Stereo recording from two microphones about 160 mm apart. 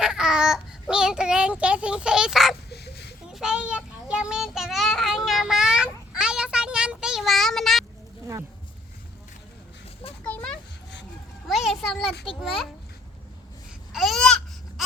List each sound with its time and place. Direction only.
0.0 s a child's voice: 5° right (ahead or behind)
2.6 s honk: 90° left
3.3 s child singing: 5° right (ahead or behind)
10.2 s a sound: 5° left (ahead or behind)
12.3 s a child's voice: centre (ahead or behind)
13.9 s babbling: centre (ahead or behind)